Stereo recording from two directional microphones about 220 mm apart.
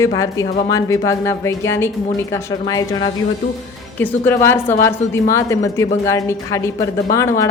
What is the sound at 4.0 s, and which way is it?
A woman's voice, 10° left (ahead or behind).